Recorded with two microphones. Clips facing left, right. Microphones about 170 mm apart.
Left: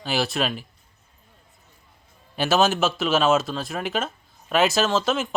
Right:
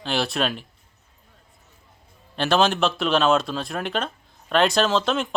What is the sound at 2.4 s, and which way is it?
Speech, 5° left (ahead or behind).